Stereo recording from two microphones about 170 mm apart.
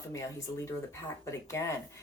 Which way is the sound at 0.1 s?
20° left (ahead or behind).